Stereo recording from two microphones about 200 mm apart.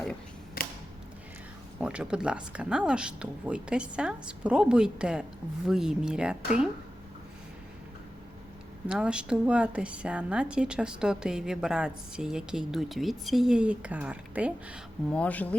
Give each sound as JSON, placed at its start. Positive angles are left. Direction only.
{"t": 0.6, "sound": "a sound", "side_deg": 45}
{"t": 1.8, "sound": "a woman's voice", "side_deg": -5}
{"t": 8.9, "sound": "a woman's voice", "side_deg": -5}
{"t": 15.1, "sound": "speech", "side_deg": 5}